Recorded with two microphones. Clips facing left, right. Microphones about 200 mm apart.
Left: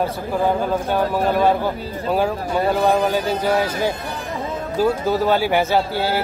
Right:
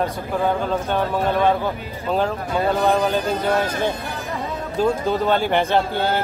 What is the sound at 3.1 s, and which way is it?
A man's voice, 5° left (ahead or behind).